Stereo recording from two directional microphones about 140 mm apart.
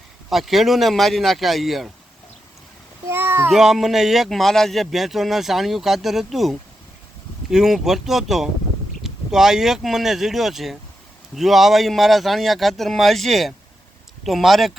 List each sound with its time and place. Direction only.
0.3 s speech: centre (ahead or behind)
3.1 s a child's voice: 15° right (ahead or behind)
3.5 s speech: centre (ahead or behind)